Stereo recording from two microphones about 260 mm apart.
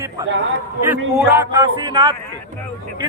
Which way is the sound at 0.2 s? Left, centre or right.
Centre.